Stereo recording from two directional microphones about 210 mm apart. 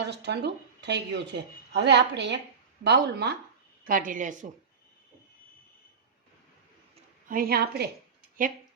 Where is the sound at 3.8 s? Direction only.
40° right (ahead or behind).